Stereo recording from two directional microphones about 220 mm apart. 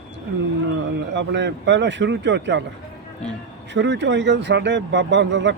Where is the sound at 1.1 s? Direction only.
55° right (ahead or behind).